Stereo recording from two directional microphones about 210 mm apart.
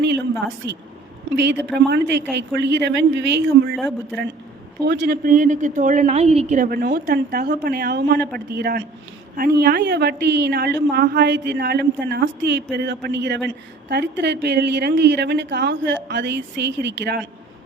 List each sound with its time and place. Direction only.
0.0 s a woman's voice: 55° right (ahead or behind)
3.8 s a woman's voice: centre (ahead or behind)
4.9 s a woman's voice: 50° right (ahead or behind)